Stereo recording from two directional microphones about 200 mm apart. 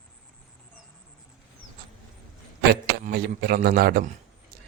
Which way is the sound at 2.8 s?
50° right (ahead or behind).